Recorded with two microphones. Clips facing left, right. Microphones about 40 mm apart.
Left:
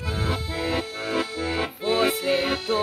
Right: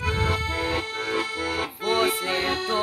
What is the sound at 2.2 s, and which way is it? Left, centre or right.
Music, centre.